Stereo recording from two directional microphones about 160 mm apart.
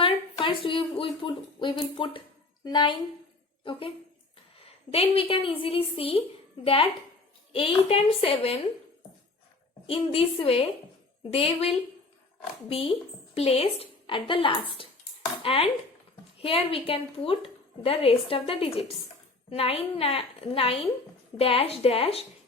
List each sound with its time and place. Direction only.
0.0 s a woman's voice: 30° left (ahead or behind)
7.5 s a woman's voice: 35° left (ahead or behind)
9.8 s a woman's voice: 35° left (ahead or behind)
14.8 s dishes: 35° left (ahead or behind)
15.4 s a woman's voice: 35° left (ahead or behind)